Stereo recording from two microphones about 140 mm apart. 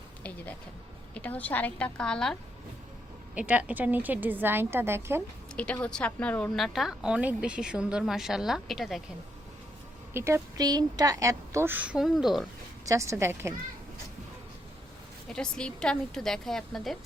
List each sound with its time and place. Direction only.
1.1 s a woman's voice: 10° left (ahead or behind)
3.3 s a woman's voice: 10° right (ahead or behind)
5.5 s speech: 10° left (ahead or behind)
10.2 s a woman's voice: 20° right (ahead or behind); by 12.5 s centre (ahead or behind)
12.8 s a woman's voice: 20° right (ahead or behind)
15.3 s speech: 5° left (ahead or behind)